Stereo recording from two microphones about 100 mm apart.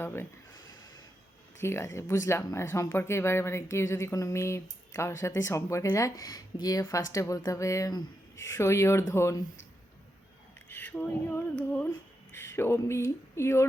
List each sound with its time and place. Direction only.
0.0 s speech: 25° left (ahead or behind)
1.6 s speech: 25° left (ahead or behind)
10.7 s speech: 15° left (ahead or behind)